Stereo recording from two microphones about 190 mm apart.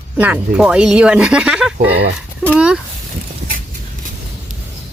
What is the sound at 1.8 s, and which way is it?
Speech, 70° right (ahead or behind).